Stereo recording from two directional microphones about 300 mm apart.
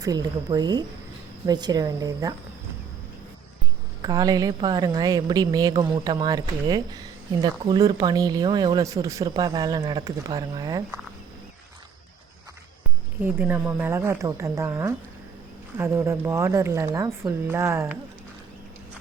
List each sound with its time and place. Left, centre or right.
0.0 s speech: centre
4.0 s speech: centre
13.2 s speech: centre